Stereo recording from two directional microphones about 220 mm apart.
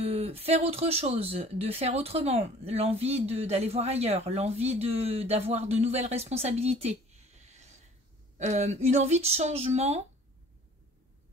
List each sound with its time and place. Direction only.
0.0 s speech: 25° right (ahead or behind)